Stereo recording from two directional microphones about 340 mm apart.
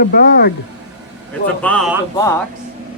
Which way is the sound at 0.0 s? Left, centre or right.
Left.